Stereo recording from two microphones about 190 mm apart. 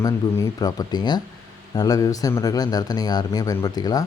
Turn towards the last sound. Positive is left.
turn(degrees=20)  # may be behind; listen again after turning